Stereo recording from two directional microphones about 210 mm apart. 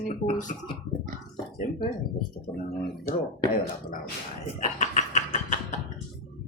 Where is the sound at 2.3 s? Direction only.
15° left (ahead or behind).